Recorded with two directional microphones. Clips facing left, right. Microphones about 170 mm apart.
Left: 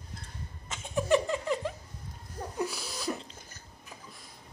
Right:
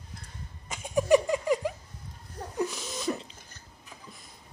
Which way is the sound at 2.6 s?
5° left (ahead or behind).